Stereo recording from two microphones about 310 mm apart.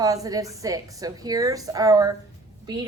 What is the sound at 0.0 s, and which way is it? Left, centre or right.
A woman's voice, centre.